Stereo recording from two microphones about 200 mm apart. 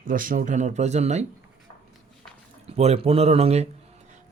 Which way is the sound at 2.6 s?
30° right (ahead or behind).